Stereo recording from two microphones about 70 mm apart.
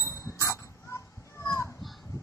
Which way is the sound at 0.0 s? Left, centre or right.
Left.